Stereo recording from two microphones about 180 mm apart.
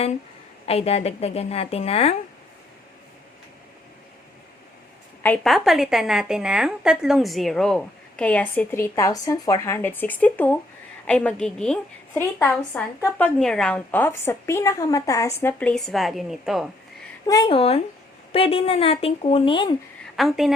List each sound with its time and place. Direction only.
0.6 s a woman's voice: 35° left (ahead or behind)
5.2 s a woman's voice: 5° left (ahead or behind)
12.2 s a woman's voice: 15° left (ahead or behind); by 16.6 s centre (ahead or behind)
17.2 s speech: 20° left (ahead or behind)
17.6 s a woman's voice: 35° left (ahead or behind)
20.1 s a woman's voice: centre (ahead or behind)